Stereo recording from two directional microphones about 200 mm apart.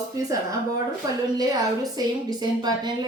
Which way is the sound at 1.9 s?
20° right (ahead or behind).